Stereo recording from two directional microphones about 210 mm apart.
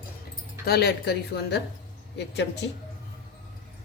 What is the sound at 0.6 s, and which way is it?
A woman's voice, 50° left (ahead or behind).